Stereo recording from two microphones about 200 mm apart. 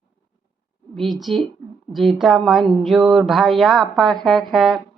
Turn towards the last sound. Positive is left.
turn(degrees=0)  # may be behind; listen again after turning